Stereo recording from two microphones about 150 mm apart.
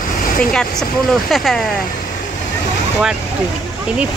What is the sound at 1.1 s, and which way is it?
Speech, centre (ahead or behind).